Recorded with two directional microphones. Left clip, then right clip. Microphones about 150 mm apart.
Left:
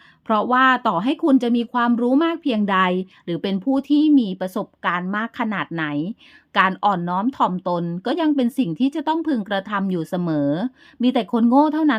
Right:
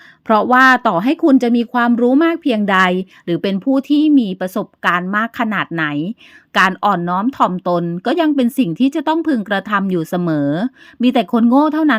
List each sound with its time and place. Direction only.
0.3 s speech: 30° right (ahead or behind)